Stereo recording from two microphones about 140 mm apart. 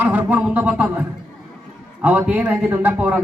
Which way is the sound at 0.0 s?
10° right (ahead or behind).